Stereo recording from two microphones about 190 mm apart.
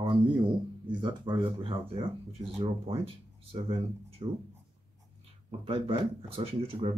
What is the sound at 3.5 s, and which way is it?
Speech, 30° right (ahead or behind).